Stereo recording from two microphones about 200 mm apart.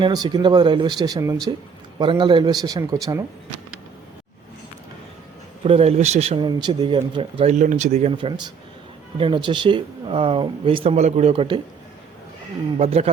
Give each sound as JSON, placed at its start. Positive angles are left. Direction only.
{"t": 0.0, "sound": "speech", "side_deg": -20}
{"t": 5.6, "sound": "speech", "side_deg": -30}
{"t": 7.6, "sound": "speech", "side_deg": -40}
{"t": 12.7, "sound": "speech", "side_deg": -30}